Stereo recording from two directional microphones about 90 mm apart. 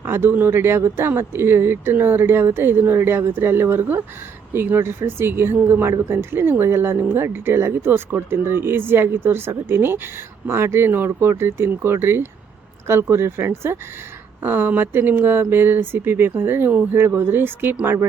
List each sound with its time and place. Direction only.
0.0 s speech: 25° right (ahead or behind)